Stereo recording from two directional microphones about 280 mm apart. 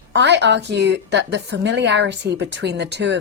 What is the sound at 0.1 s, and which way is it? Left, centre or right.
Speech, right.